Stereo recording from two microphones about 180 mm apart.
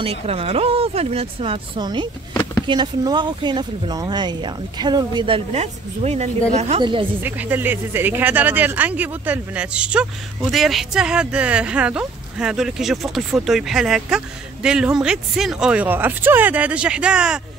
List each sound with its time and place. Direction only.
0.0 s speech: 30° right (ahead or behind)
7.2 s speech: 10° right (ahead or behind)